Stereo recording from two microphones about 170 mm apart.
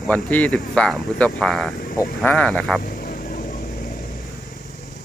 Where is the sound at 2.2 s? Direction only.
5° left (ahead or behind).